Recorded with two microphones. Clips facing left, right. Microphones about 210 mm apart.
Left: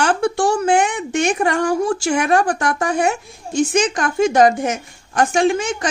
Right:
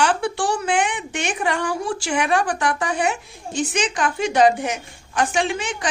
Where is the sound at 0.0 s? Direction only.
45° left (ahead or behind).